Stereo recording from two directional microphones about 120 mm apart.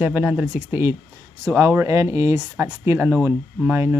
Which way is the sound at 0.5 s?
20° right (ahead or behind).